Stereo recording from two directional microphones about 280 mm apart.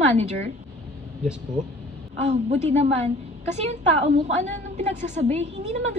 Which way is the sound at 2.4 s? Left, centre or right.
Right.